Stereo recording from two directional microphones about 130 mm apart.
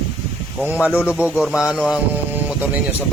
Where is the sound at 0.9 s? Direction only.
15° left (ahead or behind).